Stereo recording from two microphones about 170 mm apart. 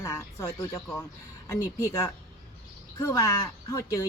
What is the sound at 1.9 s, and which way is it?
A woman's voice, 20° left (ahead or behind).